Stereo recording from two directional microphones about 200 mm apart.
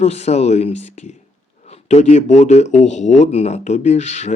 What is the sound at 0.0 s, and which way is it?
Speech, 35° left (ahead or behind).